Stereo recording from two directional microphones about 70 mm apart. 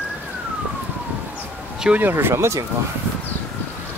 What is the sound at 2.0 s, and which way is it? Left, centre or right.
Speech, right.